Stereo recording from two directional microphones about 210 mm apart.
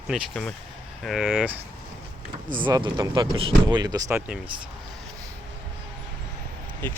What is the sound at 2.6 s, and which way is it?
Speech, 20° right (ahead or behind).